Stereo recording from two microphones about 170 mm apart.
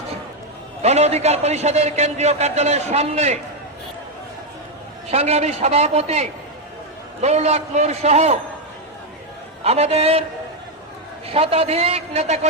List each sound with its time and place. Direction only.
0.8 s a man's voice: 40° right (ahead or behind)
5.1 s a man's voice: 40° right (ahead or behind)
9.6 s a man's voice: 40° right (ahead or behind)
11.3 s a man's voice: 35° right (ahead or behind)